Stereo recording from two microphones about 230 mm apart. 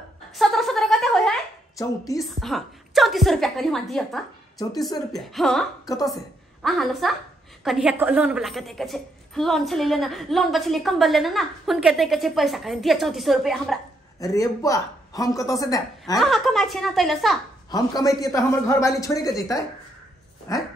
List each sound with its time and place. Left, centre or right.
0.4 s a sound: centre
2.1 s a woman's voice: centre
14.2 s speech: centre
16.2 s a woman's voice: centre
17.6 s speech: centre